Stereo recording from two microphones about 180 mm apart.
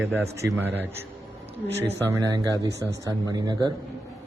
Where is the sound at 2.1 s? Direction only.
20° right (ahead or behind).